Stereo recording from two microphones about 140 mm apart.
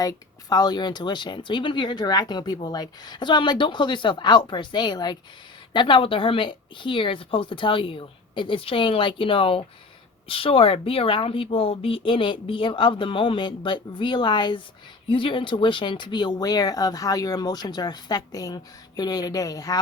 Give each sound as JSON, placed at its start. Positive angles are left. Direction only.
{"t": 0.0, "sound": "speech", "side_deg": 25}